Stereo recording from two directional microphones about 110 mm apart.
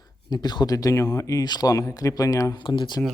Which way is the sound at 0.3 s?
40° left (ahead or behind).